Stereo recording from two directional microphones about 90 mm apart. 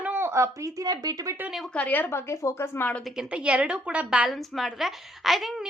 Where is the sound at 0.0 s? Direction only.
25° right (ahead or behind); by 1.4 s 40° right (ahead or behind).